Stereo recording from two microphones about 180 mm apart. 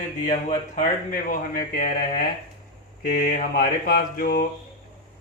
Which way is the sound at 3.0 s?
55° left (ahead or behind).